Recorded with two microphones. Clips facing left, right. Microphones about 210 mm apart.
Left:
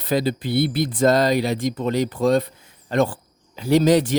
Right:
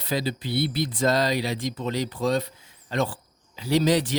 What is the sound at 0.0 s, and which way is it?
Speech, 50° left (ahead or behind).